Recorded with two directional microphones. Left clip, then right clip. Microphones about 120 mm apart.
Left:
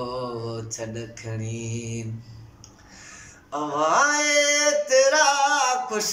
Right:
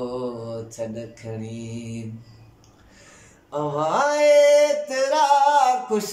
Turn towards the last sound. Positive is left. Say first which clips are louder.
# right 4 dB
turn(degrees=-40)  # may be behind; listen again after turning